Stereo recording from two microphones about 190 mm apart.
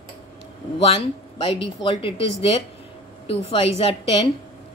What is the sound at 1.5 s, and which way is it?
Speech, 25° left (ahead or behind).